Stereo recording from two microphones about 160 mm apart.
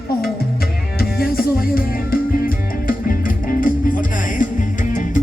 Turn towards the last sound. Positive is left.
turn(degrees=55)  # may be behind; listen again after turning